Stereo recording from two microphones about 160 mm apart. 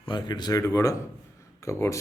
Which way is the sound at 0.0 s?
30° left (ahead or behind).